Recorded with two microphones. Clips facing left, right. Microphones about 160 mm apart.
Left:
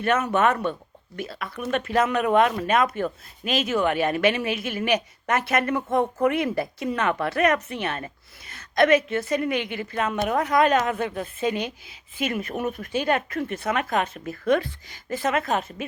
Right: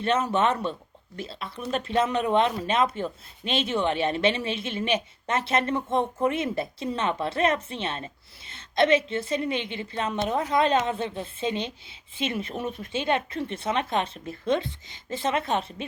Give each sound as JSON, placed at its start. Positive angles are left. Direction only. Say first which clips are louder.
{"t": 0.0, "sound": "speech", "louder": "left 2 dB", "side_deg": -30}
{"t": 10.1, "sound": "a woman's voice", "louder": "left 1 dB", "side_deg": 60}
{"t": 10.3, "sound": "speech", "louder": "left 3 dB", "side_deg": -25}
{"t": 12.4, "sound": "speech", "louder": "left 3 dB", "side_deg": 55}
{"t": 12.7, "sound": "speech", "louder": "left 1 dB", "side_deg": -25}